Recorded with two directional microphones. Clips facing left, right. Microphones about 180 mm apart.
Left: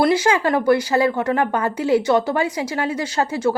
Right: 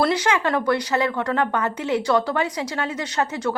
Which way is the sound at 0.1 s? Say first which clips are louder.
Left 4 dB; 30° left (ahead or behind).